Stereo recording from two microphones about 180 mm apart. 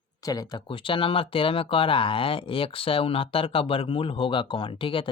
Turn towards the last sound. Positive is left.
turn(degrees=30)  # may be behind; listen again after turning